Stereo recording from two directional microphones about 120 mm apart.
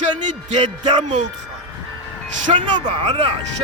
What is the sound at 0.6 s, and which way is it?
Speech, 40° right (ahead or behind).